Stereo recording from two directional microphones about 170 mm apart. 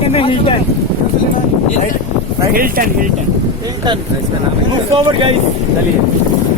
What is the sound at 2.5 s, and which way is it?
Speech, 55° right (ahead or behind).